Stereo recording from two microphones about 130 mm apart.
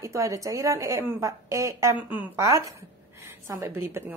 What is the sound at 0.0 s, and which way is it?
A woman's voice, 25° right (ahead or behind).